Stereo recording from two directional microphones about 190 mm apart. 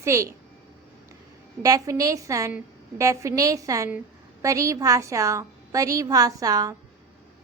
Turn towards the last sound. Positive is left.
turn(degrees=-20)  # may be behind; listen again after turning